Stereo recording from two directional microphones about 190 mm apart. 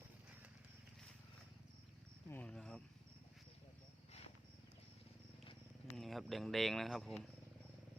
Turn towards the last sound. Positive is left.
turn(degrees=0)  # may be behind; listen again after turning